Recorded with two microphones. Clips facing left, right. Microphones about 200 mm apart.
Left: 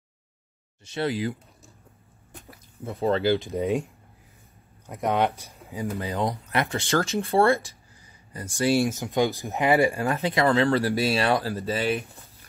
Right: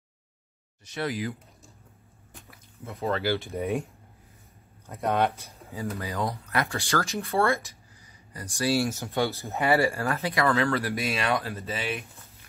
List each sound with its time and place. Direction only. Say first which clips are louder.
0.8 s speech: left 4 dB; 30° left (ahead or behind)
2.8 s speech: left 5 dB; 30° left (ahead or behind)
3.3 s speech: left 4 dB; 20° left (ahead or behind)
4.8 s speech: left 2 dB; 15° left (ahead or behind); by 7.7 s 30° left (ahead or behind)
8.5 s speech: left 3 dB; 20° left (ahead or behind)
10.5 s speech: left 4 dB; 30° left (ahead or behind)